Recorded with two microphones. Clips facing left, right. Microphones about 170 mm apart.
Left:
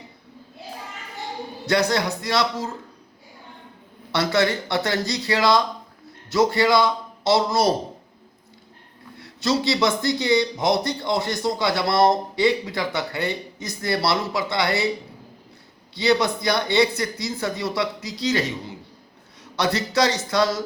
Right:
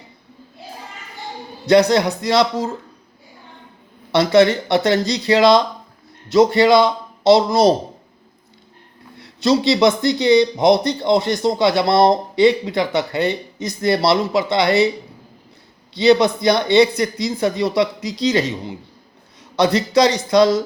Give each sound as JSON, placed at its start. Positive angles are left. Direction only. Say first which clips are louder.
{"t": 1.6, "sound": "speech", "louder": "right 8 dB", "side_deg": -20}
{"t": 4.1, "sound": "speech", "louder": "right 8 dB", "side_deg": -20}
{"t": 9.2, "sound": "a sound", "louder": "right 6 dB", "side_deg": -20}
{"t": 9.8, "sound": "speech", "louder": "right 7 dB", "side_deg": -20}
{"t": 16.0, "sound": "speech", "louder": "right 7 dB", "side_deg": -20}